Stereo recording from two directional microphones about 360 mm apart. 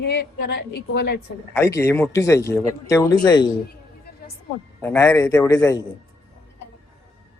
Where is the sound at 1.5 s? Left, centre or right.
Centre.